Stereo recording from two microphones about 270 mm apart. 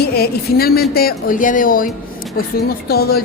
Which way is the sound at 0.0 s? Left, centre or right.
Left.